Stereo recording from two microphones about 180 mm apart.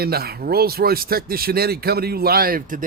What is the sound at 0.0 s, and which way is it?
Speech, 60° right (ahead or behind).